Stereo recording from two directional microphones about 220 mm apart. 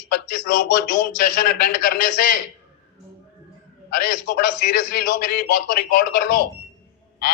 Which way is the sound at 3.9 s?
40° left (ahead or behind).